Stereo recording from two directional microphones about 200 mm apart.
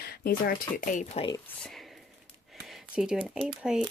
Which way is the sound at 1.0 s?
25° left (ahead or behind).